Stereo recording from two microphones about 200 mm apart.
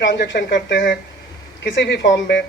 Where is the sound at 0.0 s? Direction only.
65° left (ahead or behind).